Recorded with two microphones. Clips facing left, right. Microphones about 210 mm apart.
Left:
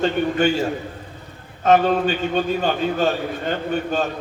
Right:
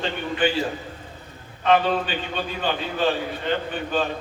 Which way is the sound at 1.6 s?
45° left (ahead or behind).